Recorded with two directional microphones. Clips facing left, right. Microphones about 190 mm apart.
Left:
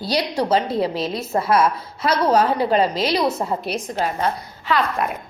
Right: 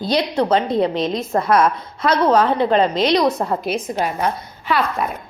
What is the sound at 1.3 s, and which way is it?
Speech, 50° right (ahead or behind).